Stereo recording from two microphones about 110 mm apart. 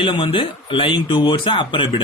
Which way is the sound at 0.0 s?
50° left (ahead or behind).